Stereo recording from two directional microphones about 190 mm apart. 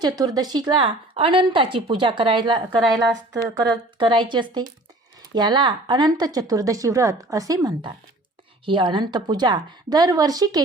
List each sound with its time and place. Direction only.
0.0 s speech: 20° right (ahead or behind)